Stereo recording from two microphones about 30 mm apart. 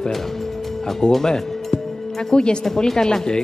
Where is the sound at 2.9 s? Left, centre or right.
Left.